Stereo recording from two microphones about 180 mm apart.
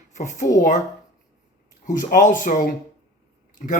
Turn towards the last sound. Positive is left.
turn(degrees=50)  # may be behind; listen again after turning